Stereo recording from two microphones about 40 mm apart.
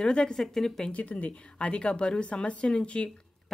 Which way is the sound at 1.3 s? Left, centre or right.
Left.